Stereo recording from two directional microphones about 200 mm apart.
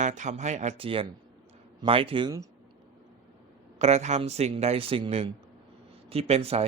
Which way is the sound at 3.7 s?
35° right (ahead or behind).